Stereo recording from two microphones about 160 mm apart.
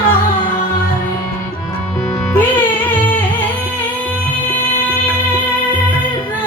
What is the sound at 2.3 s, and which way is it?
Music, 10° left (ahead or behind).